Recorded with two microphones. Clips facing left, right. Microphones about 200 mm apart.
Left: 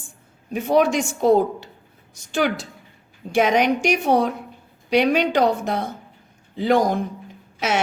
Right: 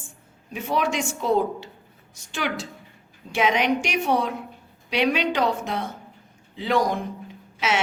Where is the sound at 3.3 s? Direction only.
45° left (ahead or behind).